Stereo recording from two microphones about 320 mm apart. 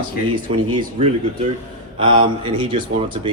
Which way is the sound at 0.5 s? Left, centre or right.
Centre.